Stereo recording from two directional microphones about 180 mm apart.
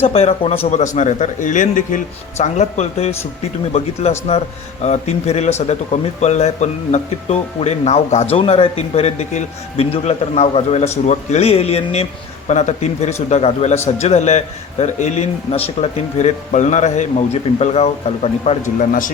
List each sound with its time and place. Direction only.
0.0 s speech: 35° left (ahead or behind)
4.3 s speech: 35° left (ahead or behind)
18.8 s speech: 45° left (ahead or behind)